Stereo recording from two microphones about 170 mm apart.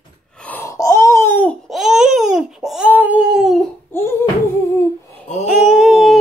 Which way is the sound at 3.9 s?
15° left (ahead or behind).